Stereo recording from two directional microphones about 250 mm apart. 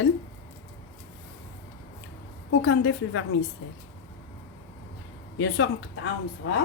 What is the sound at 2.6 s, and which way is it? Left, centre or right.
Speech, left.